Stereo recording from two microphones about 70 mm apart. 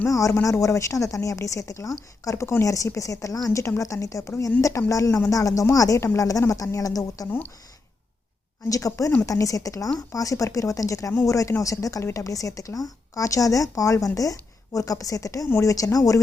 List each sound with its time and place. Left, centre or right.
0.1 s speech: left
2.3 s speech: left
7.3 s speech: left
8.7 s speech: left